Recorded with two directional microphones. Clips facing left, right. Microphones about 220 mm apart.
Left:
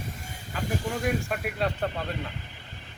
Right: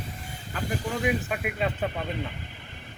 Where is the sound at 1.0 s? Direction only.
Centre (ahead or behind).